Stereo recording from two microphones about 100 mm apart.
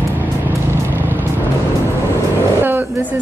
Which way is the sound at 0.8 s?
20° right (ahead or behind).